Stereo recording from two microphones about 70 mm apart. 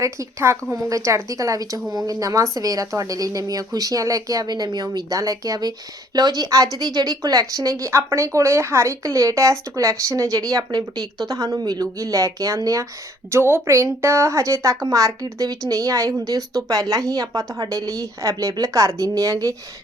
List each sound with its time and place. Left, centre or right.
0.0 s a woman's voice: right
11.9 s a woman's voice: right
13.3 s a woman's voice: right
14.8 s a woman's voice: right
15.7 s a woman's voice: right